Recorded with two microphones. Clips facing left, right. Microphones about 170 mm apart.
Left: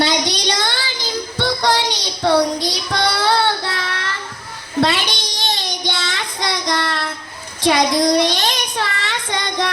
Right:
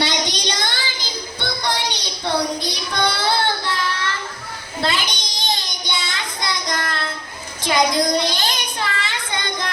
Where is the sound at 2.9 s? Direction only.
75° left (ahead or behind).